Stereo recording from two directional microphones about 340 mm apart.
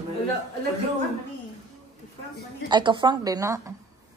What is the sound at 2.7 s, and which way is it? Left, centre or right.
Speech, centre.